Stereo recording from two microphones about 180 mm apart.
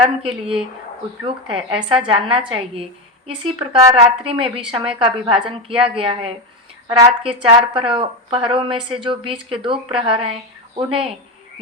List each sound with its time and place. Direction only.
0.0 s a woman's voice: 30° right (ahead or behind)
6.8 s a woman's voice: 20° right (ahead or behind)